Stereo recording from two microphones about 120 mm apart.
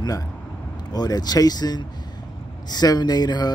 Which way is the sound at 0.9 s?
35° left (ahead or behind).